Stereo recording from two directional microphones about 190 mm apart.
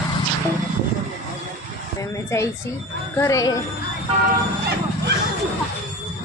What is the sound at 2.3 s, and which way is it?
Speech, 15° left (ahead or behind).